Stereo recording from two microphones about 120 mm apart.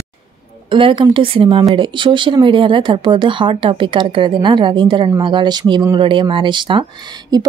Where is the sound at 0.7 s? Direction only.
45° right (ahead or behind).